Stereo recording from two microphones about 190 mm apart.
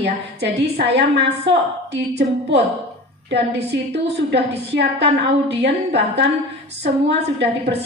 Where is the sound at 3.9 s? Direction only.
65° right (ahead or behind).